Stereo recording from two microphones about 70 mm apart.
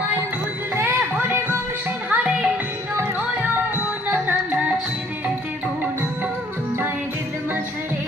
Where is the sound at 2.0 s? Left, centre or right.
Right.